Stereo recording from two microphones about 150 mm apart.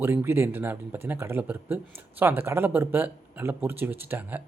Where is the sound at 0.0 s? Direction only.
15° right (ahead or behind).